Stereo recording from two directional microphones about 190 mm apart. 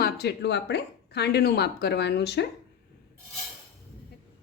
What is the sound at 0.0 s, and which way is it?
Speech, 60° left (ahead or behind).